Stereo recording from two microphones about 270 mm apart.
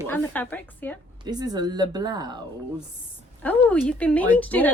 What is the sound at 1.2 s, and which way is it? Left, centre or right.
A woman's voice, centre.